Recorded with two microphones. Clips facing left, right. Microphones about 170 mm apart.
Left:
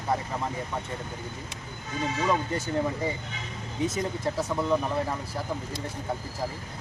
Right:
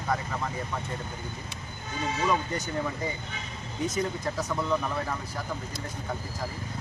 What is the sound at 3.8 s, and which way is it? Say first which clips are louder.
Speech: even; 25° left (ahead or behind).